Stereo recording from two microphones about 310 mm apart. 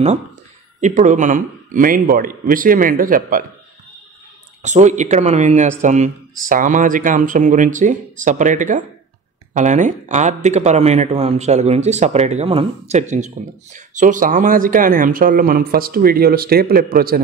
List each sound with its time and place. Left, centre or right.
0.7 s speech: right
4.6 s speech: right